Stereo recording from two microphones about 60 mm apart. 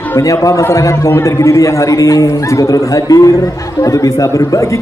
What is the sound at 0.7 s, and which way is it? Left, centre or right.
A man's voice, left.